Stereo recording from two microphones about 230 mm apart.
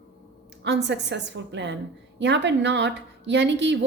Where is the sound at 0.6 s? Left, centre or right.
Right.